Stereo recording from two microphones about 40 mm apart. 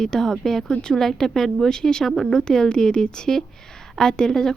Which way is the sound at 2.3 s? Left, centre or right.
Centre.